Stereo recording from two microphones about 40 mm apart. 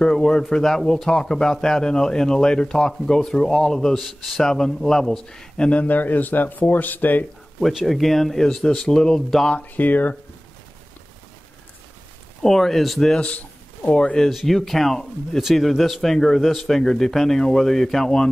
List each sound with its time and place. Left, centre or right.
0.0 s speech: centre
5.7 s speech: left
7.8 s speech: centre
8.5 s speech: centre
9.6 s speech: left
12.4 s speech: centre
14.3 s speech: centre